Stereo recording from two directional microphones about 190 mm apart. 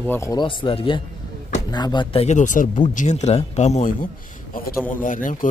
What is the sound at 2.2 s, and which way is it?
Speech, 40° left (ahead or behind).